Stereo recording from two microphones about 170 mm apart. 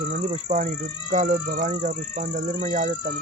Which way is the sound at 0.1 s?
50° right (ahead or behind).